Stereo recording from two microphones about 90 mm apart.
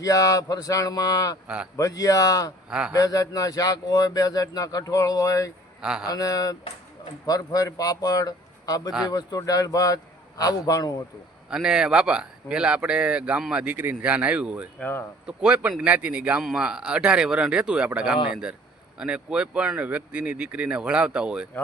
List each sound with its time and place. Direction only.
0.0 s a man's voice: 40° left (ahead or behind)
2.6 s a man's voice: 10° right (ahead or behind)
2.9 s speech: 40° left (ahead or behind)
5.8 s speech: 10° right (ahead or behind)
6.1 s a man's voice: 45° left (ahead or behind)
11.4 s speech: 10° right (ahead or behind)
14.8 s speech: 20° left (ahead or behind)
15.3 s speech: 15° right (ahead or behind)